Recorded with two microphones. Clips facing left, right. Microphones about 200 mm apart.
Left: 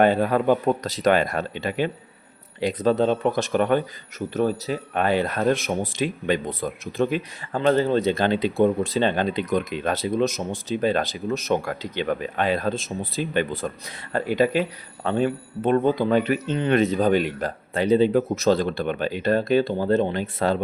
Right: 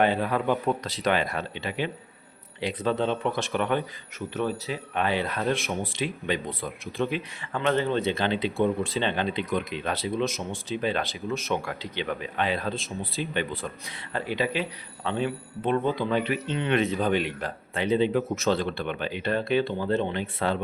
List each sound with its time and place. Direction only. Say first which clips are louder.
0.0 s speech: left 5 dB; 45° left (ahead or behind)